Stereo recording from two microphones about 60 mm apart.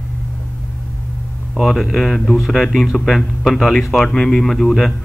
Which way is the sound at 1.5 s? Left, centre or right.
Centre.